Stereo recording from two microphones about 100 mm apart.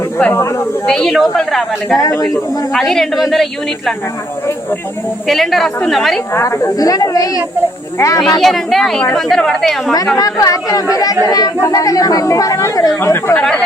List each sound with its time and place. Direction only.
0.9 s a woman's voice: 5° left (ahead or behind)
2.0 s speech: 35° left (ahead or behind)
2.7 s a woman's voice: 5° left (ahead or behind)
5.3 s a woman's voice: centre (ahead or behind)
6.3 s speech: 30° left (ahead or behind)
8.4 s a woman's voice: centre (ahead or behind)
10.2 s speech: 35° left (ahead or behind)